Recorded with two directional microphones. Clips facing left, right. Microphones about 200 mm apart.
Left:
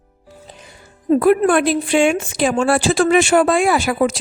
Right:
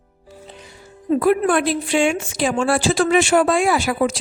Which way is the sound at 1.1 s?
55° left (ahead or behind).